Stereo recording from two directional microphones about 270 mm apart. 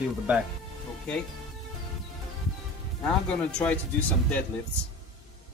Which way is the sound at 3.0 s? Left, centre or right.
Centre.